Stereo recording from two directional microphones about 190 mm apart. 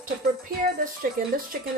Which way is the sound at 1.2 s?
50° right (ahead or behind).